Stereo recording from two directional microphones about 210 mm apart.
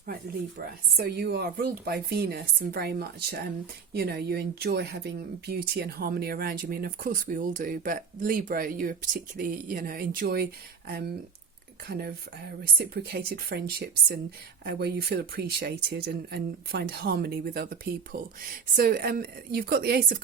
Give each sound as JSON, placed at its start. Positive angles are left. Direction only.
{"t": 0.9, "sound": "speech", "side_deg": -50}